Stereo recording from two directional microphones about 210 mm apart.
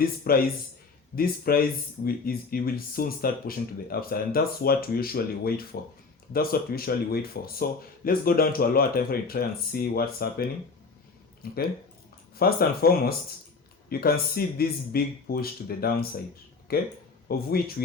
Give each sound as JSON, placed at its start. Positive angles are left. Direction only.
{"t": 0.3, "sound": "speech", "side_deg": 45}